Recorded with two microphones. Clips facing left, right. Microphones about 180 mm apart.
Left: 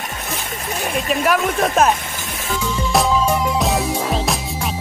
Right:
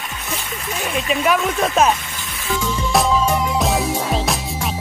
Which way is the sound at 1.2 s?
Centre (ahead or behind).